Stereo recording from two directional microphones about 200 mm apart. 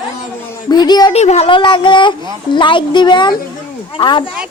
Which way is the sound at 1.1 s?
35° left (ahead or behind).